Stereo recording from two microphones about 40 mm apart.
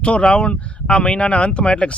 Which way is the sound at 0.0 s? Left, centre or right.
Left.